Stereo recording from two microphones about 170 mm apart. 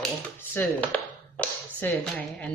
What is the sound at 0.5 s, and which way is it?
Speech, 10° left (ahead or behind).